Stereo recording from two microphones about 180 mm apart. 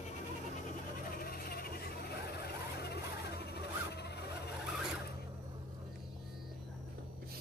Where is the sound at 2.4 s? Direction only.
65° left (ahead or behind).